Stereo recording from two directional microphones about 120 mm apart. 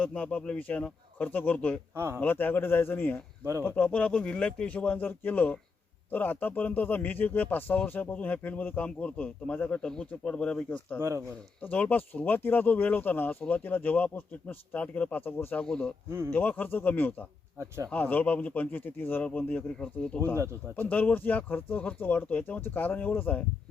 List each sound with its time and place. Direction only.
0.0 s speech: 10° left (ahead or behind)
2.0 s a man's voice: 20° right (ahead or behind)
2.2 s speech: 15° left (ahead or behind)
16.0 s a man's voice: 20° right (ahead or behind)
16.3 s speech: 15° left (ahead or behind)